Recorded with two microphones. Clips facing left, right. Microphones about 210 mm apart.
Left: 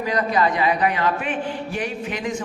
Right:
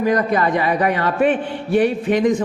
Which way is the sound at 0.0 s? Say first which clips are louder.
Right 4 dB; 50° right (ahead or behind).